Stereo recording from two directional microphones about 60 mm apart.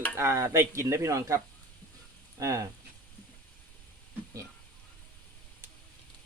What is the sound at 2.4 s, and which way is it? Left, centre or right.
Speech, right.